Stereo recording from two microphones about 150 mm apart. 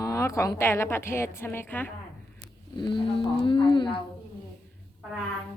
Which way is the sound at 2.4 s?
35° left (ahead or behind).